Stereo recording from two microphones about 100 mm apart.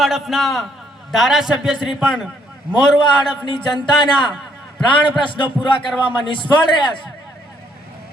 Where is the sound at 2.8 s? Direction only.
50° left (ahead or behind).